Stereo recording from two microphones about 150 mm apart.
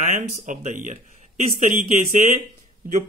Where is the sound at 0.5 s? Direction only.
55° right (ahead or behind).